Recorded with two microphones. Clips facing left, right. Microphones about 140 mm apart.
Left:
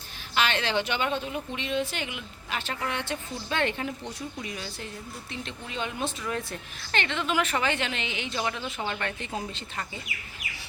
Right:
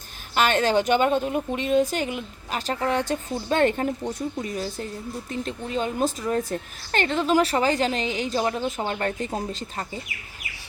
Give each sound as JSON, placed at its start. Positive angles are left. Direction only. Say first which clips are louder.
{"t": 0.3, "sound": "a woman's voice", "louder": "right 6 dB", "side_deg": -45}